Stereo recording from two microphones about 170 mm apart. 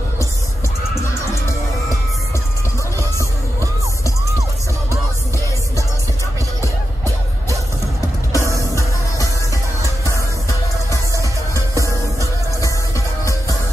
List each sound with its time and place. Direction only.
8.3 s music: 20° left (ahead or behind)
11.1 s music: 20° right (ahead or behind)
13.2 s music: 20° left (ahead or behind)